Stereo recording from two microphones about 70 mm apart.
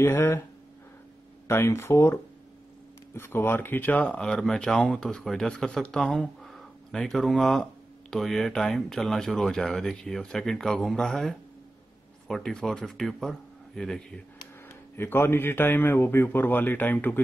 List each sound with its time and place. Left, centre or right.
0.0 s speech: left
1.5 s speech: left
4.2 s speech: centre
6.4 s a sound: centre
8.1 s speech: centre
14.7 s speech: left